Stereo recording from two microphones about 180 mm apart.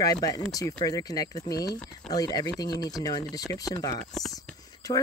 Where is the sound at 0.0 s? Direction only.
20° left (ahead or behind).